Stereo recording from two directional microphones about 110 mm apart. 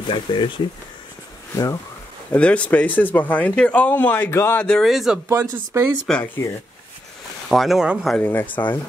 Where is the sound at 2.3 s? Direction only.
10° left (ahead or behind).